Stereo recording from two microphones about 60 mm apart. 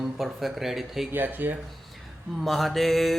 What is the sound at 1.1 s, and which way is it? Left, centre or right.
Speech, right.